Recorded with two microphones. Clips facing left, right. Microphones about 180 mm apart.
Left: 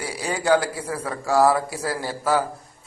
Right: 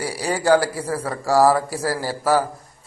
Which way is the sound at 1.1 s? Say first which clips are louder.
Right 2 dB; 15° right (ahead or behind).